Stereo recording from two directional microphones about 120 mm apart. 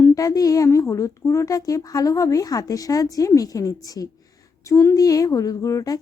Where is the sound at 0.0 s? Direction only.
25° left (ahead or behind).